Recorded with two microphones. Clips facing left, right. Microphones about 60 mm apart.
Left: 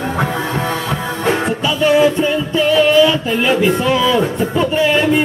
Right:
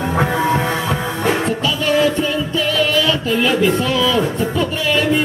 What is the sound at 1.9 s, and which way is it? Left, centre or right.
Music, left.